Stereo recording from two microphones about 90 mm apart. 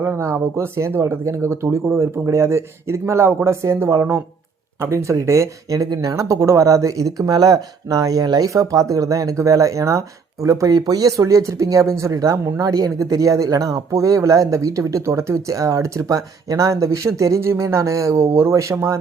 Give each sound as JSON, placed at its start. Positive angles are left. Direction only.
{"t": 0.0, "sound": "speech", "side_deg": -30}